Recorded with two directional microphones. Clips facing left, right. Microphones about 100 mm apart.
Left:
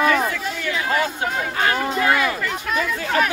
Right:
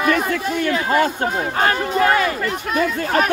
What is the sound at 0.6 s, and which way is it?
Speech, 45° right (ahead or behind).